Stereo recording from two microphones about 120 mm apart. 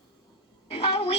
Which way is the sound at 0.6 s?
55° left (ahead or behind).